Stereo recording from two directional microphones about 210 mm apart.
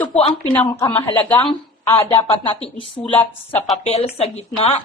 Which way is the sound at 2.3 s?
25° left (ahead or behind).